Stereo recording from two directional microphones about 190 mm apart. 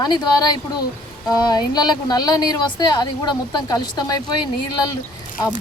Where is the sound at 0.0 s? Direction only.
20° left (ahead or behind).